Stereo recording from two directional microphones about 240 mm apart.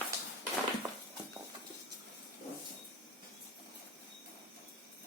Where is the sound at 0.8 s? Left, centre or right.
Centre.